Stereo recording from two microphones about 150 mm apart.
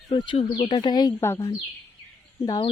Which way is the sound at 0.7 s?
30° left (ahead or behind).